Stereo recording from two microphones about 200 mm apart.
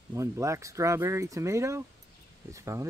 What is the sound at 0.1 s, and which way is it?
Speech, 15° right (ahead or behind).